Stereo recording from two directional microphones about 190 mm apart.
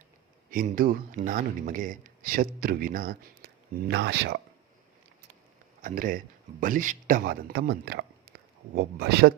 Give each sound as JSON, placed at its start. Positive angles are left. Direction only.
{"t": 0.5, "sound": "speech", "side_deg": -50}
{"t": 5.8, "sound": "speech", "side_deg": -45}